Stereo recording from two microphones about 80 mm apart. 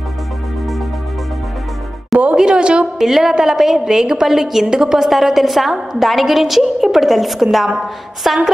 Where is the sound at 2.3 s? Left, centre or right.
Centre.